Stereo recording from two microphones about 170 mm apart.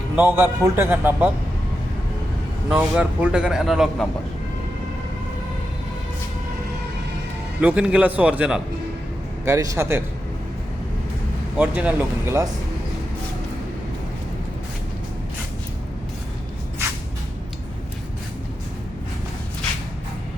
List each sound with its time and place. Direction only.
0.2 s a man's voice: 15° right (ahead or behind)
2.6 s speech: 10° right (ahead or behind)
7.6 s a man's voice: 5° right (ahead or behind)
9.4 s a man's voice: 20° right (ahead or behind)
11.5 s a man's voice: 10° right (ahead or behind)